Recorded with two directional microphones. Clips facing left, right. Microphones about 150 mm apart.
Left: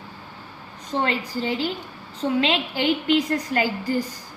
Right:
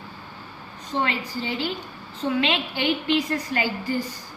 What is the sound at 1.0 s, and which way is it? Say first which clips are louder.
Speech: left 3 dB; 45° left (ahead or behind).